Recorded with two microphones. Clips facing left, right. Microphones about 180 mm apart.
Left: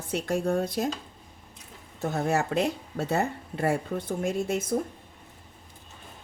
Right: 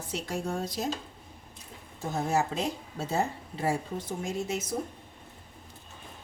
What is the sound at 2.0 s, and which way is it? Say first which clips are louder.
Speech: left 2 dB; 65° left (ahead or behind).